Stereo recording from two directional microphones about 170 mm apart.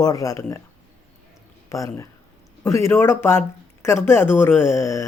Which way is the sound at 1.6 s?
20° left (ahead or behind).